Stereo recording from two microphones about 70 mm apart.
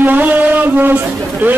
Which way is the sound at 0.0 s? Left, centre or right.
Right.